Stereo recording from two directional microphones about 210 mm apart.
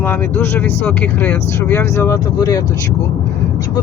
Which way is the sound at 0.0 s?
10° left (ahead or behind).